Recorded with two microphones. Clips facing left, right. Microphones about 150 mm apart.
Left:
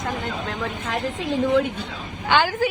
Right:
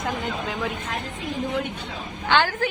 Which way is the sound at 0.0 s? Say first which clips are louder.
Even; centre (ahead or behind).